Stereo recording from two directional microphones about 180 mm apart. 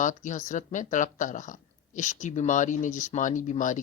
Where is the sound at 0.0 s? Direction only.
45° left (ahead or behind).